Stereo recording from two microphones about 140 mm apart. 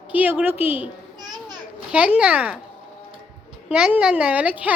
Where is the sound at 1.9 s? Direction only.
5° right (ahead or behind).